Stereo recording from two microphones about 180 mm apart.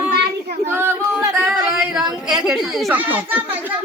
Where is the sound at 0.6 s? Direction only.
10° right (ahead or behind).